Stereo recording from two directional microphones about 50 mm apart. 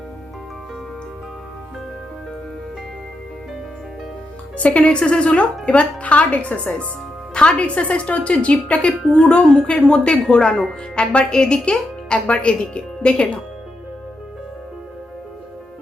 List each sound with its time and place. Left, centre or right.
4.5 s a woman's voice: left